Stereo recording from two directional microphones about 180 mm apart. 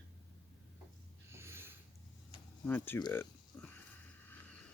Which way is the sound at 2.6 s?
10° left (ahead or behind).